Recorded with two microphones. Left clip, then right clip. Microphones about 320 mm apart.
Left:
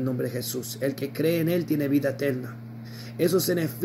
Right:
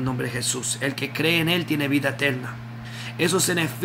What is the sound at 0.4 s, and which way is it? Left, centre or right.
Speech, centre.